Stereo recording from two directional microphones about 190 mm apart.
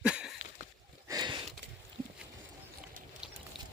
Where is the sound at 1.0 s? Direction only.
20° right (ahead or behind).